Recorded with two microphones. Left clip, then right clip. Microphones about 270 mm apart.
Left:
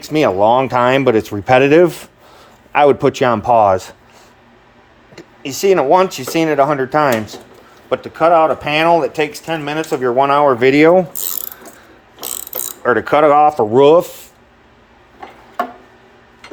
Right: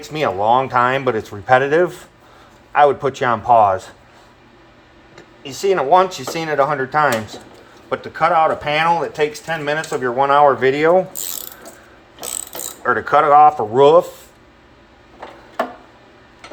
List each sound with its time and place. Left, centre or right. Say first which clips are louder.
0.0 s speech: left 6 dB; left
5.1 s speech: left 6 dB; left
12.8 s speech: left 3 dB; left